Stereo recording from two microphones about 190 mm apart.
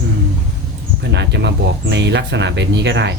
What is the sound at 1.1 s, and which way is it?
Speech, 65° right (ahead or behind).